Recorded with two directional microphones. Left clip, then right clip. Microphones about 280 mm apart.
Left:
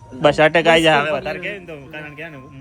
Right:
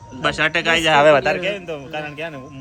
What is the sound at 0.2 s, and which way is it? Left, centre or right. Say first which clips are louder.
Speech: left 5 dB; centre.